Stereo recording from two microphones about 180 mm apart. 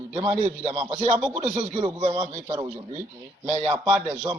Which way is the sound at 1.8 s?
25° right (ahead or behind).